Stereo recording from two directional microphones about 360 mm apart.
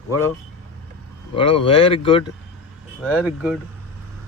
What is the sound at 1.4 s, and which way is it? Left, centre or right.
Speech, centre.